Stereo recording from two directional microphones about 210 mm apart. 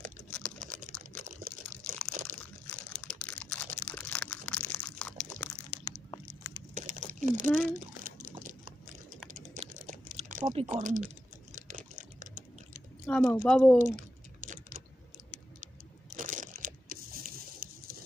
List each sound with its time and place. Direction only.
0.6 s typing: 40° right (ahead or behind)
2.3 s crumpling: 40° right (ahead or behind)
2.6 s a sound: 5° left (ahead or behind)
6.8 s a sound: 35° right (ahead or behind)
9.3 s typing: 40° right (ahead or behind)
10.1 s a sound: 35° right (ahead or behind)
10.4 s speech: 25° right (ahead or behind)
11.5 s typing: 40° right (ahead or behind)
13.0 s speech: 5° left (ahead or behind)
13.7 s typing: 35° right (ahead or behind)
16.2 s crumpling: 35° right (ahead or behind)